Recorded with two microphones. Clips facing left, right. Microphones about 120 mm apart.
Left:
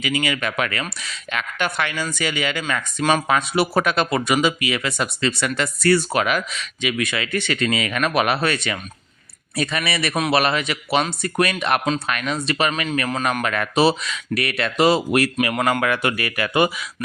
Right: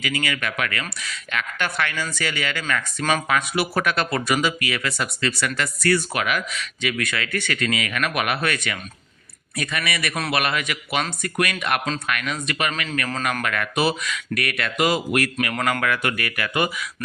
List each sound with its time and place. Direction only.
0.0 s a man's voice: 20° left (ahead or behind)